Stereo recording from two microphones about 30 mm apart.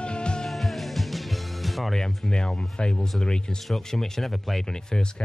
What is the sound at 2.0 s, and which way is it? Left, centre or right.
Speech, left.